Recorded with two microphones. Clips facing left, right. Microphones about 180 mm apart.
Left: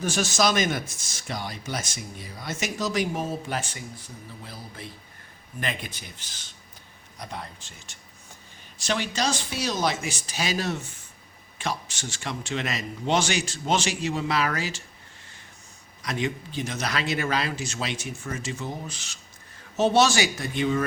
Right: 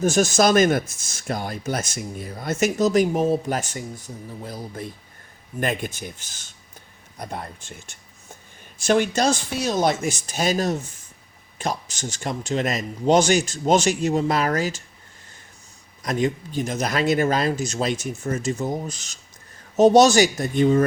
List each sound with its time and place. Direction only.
0.0 s speech: 45° right (ahead or behind)
16.0 s speech: 45° right (ahead or behind)